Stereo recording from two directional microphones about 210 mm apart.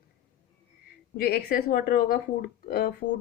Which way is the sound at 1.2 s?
50° left (ahead or behind).